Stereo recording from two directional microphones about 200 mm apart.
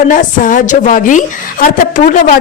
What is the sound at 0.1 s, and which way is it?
A woman's voice, 40° left (ahead or behind).